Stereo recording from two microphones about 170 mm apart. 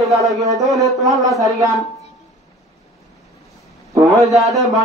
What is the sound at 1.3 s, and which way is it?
Speech, 20° right (ahead or behind).